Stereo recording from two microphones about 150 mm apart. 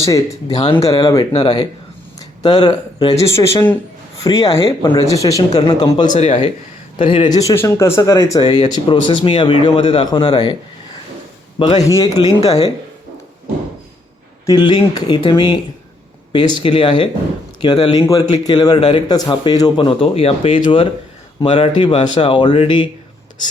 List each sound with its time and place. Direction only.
0.0 s speech: 25° left (ahead or behind)
6.1 s a man's voice: 40° left (ahead or behind)
11.6 s speech: 25° left (ahead or behind)
14.4 s a man's voice: 30° left (ahead or behind)